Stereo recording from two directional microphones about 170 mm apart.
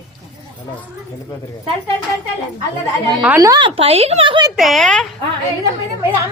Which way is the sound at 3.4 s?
25° right (ahead or behind).